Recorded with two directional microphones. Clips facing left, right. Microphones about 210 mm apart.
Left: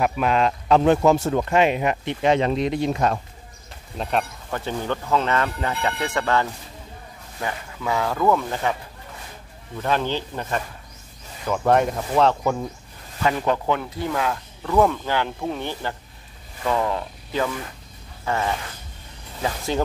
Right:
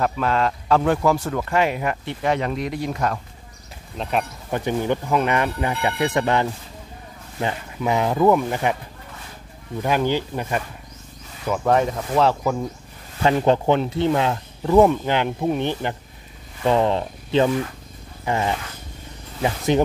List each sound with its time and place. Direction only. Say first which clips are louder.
0.0 s speech: left 1 dB; 15° left (ahead or behind)
4.0 s speech: even; 5° right (ahead or behind)
4.5 s speech: right 4 dB; 15° right (ahead or behind)
9.8 s speech: right 3 dB; 10° right (ahead or behind)
11.4 s speech: even; centre (ahead or behind)
13.2 s speech: right 4 dB; 30° right (ahead or behind)